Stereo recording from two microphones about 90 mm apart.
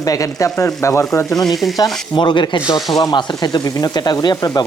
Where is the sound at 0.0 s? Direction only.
40° left (ahead or behind).